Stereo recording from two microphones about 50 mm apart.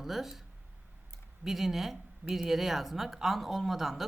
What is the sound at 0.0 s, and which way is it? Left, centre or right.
Speech, centre.